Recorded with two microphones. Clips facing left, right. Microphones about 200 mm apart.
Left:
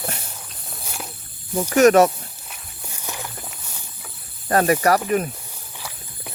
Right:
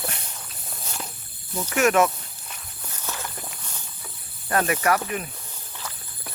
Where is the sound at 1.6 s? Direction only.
40° left (ahead or behind).